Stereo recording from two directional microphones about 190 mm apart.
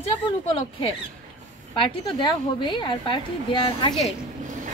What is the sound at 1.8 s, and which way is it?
A woman's voice, 25° left (ahead or behind).